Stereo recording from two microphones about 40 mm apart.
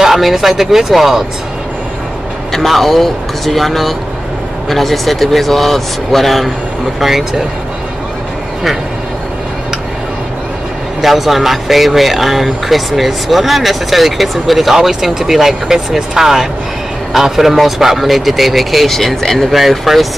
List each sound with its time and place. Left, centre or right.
0.0 s speech: centre
2.5 s speech: centre
11.0 s speech: centre